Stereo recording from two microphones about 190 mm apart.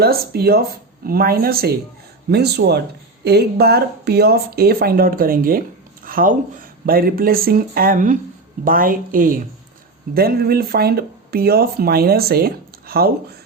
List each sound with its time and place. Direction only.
0.0 s speech: 55° right (ahead or behind)